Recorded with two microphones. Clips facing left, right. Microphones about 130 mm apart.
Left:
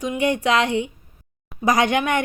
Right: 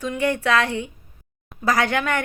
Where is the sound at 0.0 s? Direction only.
15° left (ahead or behind).